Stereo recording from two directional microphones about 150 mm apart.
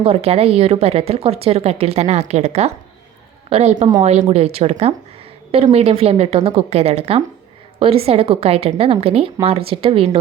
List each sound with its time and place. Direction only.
0.0 s a woman's voice: 40° right (ahead or behind)